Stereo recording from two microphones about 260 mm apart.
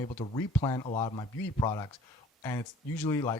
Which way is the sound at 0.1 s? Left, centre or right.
Centre.